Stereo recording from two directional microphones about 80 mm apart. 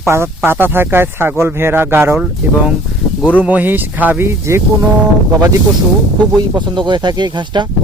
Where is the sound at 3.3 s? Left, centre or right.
Centre.